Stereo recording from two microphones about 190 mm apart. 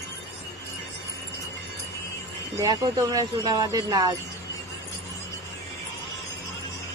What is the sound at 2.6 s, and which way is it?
Speech, 20° right (ahead or behind).